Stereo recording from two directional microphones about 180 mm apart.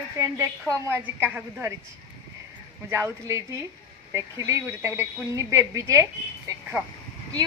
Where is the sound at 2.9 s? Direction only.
15° right (ahead or behind).